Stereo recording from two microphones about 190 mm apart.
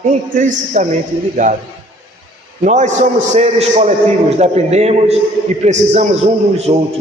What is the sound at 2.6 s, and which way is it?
A man's voice, 40° right (ahead or behind).